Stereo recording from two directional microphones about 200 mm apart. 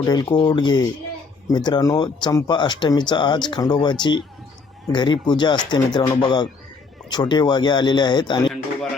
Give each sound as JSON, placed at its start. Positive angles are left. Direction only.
{"t": 0.0, "sound": "speech", "side_deg": 20}